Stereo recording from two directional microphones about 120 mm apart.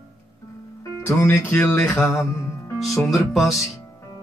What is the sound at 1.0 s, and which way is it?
Music, 20° left (ahead or behind).